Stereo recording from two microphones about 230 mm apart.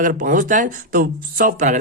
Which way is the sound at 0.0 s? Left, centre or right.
Right.